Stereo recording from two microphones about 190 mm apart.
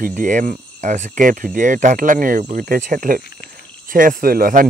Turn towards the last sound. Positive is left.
turn(degrees=-50)  # may be behind; listen again after turning